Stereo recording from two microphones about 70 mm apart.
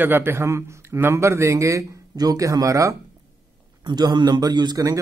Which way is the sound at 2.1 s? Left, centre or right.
Right.